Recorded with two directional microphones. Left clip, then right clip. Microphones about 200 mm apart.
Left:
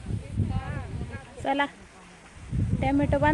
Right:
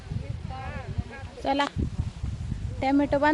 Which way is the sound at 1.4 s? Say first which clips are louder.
Even; 5° right (ahead or behind).